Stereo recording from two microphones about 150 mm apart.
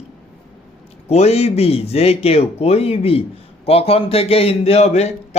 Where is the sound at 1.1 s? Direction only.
45° left (ahead or behind).